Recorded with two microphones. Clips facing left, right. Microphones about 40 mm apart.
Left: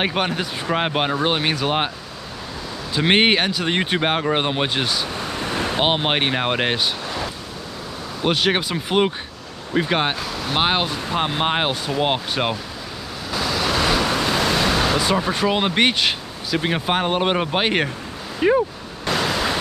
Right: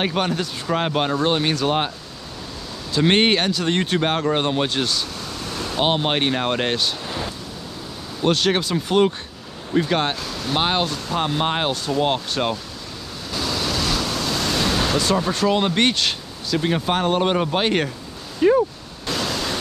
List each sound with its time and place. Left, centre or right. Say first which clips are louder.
0.0 s speech: even; centre
2.9 s speech: even; centre
5.2 s vehicle: left 5 dB; left
5.8 s speech: right 1 dB; left
8.2 s speech: even; centre
13.3 s waves: left 2 dB; centre
13.7 s speech: left 4 dB; left
19.0 s waves: left 3 dB; centre